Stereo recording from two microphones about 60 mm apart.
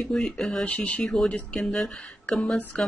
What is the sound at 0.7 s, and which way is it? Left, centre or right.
Speech, left.